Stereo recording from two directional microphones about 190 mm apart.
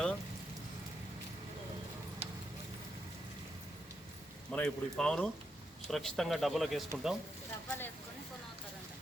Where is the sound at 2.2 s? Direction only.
35° right (ahead or behind).